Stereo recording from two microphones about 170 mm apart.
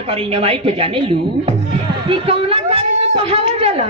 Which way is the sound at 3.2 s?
35° right (ahead or behind).